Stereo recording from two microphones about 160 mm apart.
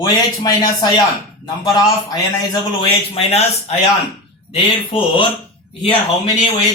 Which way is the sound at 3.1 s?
40° left (ahead or behind).